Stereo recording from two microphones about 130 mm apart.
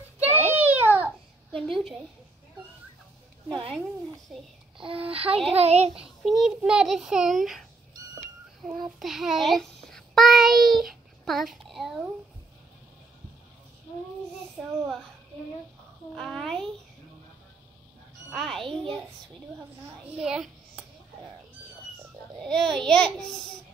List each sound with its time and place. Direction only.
0.5 s a sound: 15° right (ahead or behind)
1.5 s a sound: centre (ahead or behind)
3.4 s speech: 40° right (ahead or behind)
4.3 s a child's voice: centre (ahead or behind)
4.7 s a child's voice: 45° right (ahead or behind)
5.9 s a child's voice: 5° right (ahead or behind)
9.0 s a child's voice: 5° right (ahead or behind)
14.6 s a child's voice: 5° right (ahead or behind)
16.2 s a child's voice: 5° left (ahead or behind)
18.3 s a child's voice: 5° left (ahead or behind)
20.1 s a child's voice: 5° right (ahead or behind)
22.4 s a child's voice: 5° left (ahead or behind)